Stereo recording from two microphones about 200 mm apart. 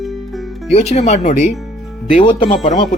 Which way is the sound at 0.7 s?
35° left (ahead or behind).